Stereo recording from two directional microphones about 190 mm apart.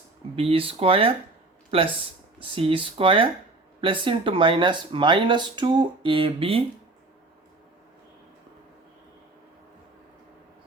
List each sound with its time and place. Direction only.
0.3 s speech: 30° right (ahead or behind)